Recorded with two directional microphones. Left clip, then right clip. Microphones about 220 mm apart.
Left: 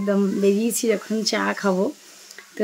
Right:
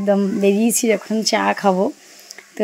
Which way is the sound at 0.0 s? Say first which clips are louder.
Right 4 dB; 15° right (ahead or behind).